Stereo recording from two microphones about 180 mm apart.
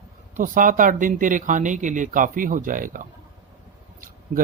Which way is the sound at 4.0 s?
50° right (ahead or behind).